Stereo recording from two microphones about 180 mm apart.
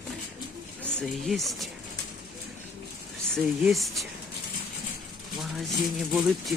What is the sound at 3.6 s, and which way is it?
Speech, centre (ahead or behind).